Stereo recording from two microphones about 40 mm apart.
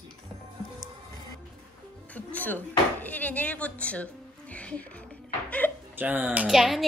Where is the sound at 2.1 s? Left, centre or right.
Left.